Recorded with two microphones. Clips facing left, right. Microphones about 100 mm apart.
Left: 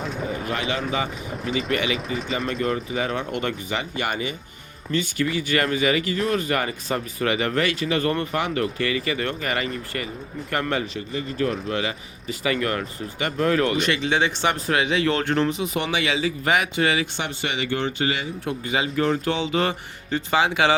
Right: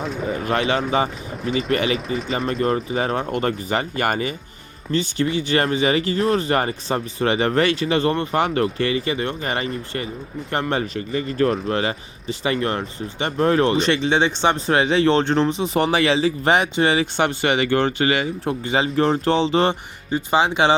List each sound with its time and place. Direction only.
0.0 s speech: centre (ahead or behind)
0.4 s speech: 40° right (ahead or behind)
1.3 s speech: centre (ahead or behind)
1.7 s speech: 40° right (ahead or behind)
4.9 s speech: 30° right (ahead or behind)
8.4 s speech: 40° right (ahead or behind)
11.3 s speech: 40° right (ahead or behind)
17.2 s speech: 60° right (ahead or behind)
18.4 s speech: 35° right (ahead or behind)
20.1 s speech: 20° right (ahead or behind)